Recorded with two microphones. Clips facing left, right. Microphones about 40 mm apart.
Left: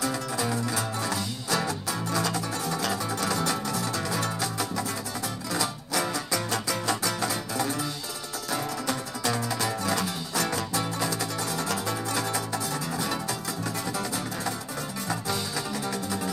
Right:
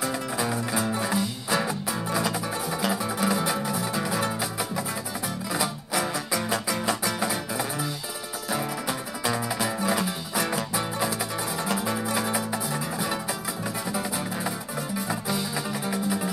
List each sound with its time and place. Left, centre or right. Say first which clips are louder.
0.0 s music: right 1 dB; centre